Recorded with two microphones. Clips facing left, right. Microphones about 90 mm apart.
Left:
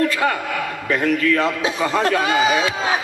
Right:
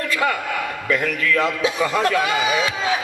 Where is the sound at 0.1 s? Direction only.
35° left (ahead or behind).